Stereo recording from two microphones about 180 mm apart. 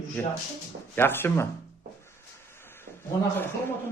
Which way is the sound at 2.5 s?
15° left (ahead or behind).